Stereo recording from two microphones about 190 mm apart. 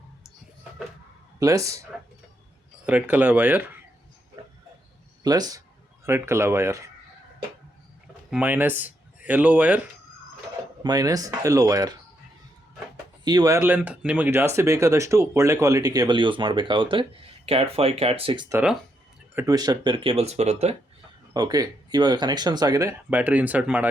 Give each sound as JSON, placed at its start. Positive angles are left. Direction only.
{"t": 1.4, "sound": "speech", "side_deg": -15}
{"t": 2.8, "sound": "speech", "side_deg": -5}
{"t": 5.2, "sound": "speech", "side_deg": -20}
{"t": 8.3, "sound": "speech", "side_deg": -10}
{"t": 10.8, "sound": "speech", "side_deg": -20}
{"t": 13.2, "sound": "speech", "side_deg": -20}
{"t": 18.4, "sound": "speech", "side_deg": -15}
{"t": 21.3, "sound": "speech", "side_deg": -20}
{"t": 23.0, "sound": "speech", "side_deg": -10}